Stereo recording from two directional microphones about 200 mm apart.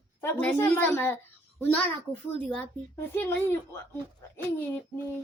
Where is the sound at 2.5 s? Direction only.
10° left (ahead or behind).